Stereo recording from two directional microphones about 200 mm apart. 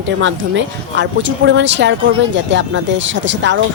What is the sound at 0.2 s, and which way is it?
Speech, 65° right (ahead or behind).